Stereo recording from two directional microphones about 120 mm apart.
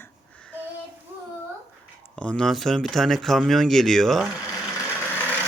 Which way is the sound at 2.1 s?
10° left (ahead or behind).